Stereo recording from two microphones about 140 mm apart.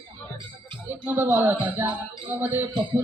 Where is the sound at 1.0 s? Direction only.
10° right (ahead or behind).